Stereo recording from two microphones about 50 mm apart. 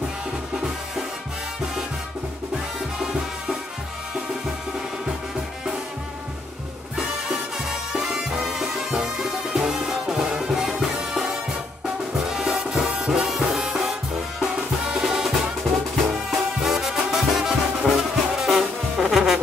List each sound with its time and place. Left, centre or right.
7.9 s music: centre
15.0 s music: centre